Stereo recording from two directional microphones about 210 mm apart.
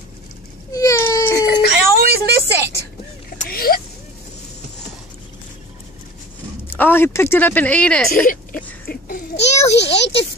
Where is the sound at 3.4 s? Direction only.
45° left (ahead or behind).